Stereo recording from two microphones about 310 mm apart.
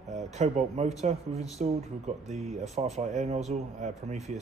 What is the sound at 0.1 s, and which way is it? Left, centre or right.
Speech, right.